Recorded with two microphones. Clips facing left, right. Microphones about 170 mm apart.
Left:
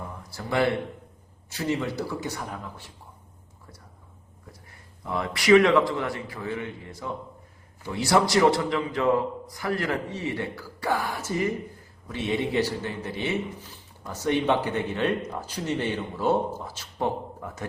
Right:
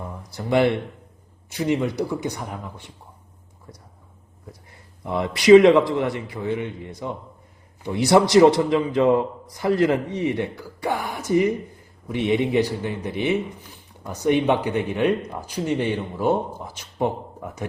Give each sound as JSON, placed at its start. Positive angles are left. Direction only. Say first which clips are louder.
{"t": 0.3, "sound": "a man's voice", "louder": "right 5 dB", "side_deg": -20}
{"t": 4.7, "sound": "a man's voice", "louder": "right 4 dB", "side_deg": -20}